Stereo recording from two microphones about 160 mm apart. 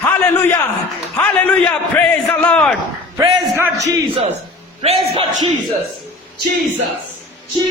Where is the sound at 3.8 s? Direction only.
40° right (ahead or behind).